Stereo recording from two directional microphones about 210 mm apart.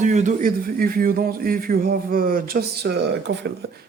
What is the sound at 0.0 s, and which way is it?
A man's voice, 35° right (ahead or behind).